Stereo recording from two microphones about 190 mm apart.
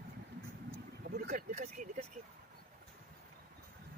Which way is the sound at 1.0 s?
50° right (ahead or behind).